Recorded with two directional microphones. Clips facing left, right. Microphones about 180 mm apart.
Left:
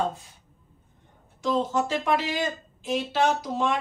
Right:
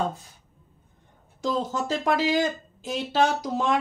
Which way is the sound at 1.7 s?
40° right (ahead or behind).